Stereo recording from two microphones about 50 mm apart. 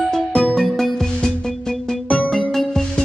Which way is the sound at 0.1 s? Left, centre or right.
Centre.